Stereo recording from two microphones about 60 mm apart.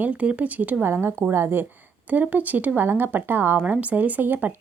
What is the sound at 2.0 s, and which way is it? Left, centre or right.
Speech, right.